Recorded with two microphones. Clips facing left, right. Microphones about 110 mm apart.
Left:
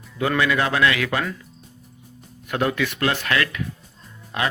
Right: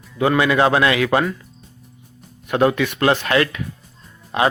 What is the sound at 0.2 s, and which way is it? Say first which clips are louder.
A man's voice: right 5 dB; 25° right (ahead or behind).